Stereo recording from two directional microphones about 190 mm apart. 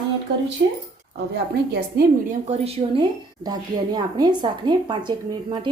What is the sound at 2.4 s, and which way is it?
A woman's voice, 35° right (ahead or behind).